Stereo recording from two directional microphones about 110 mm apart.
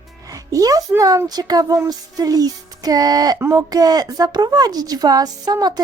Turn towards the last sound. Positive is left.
turn(degrees=-35)  # may be behind; listen again after turning